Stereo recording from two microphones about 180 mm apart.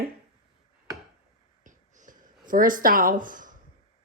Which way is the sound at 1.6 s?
45° right (ahead or behind).